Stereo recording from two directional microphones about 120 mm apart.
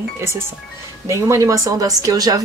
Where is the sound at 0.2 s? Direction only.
20° right (ahead or behind).